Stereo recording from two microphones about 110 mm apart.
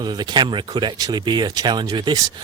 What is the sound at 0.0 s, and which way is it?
Speech, 40° right (ahead or behind).